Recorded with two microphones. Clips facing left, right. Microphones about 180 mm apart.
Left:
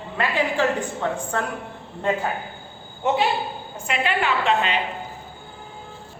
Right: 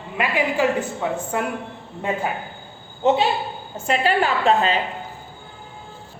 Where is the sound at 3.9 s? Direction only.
35° right (ahead or behind).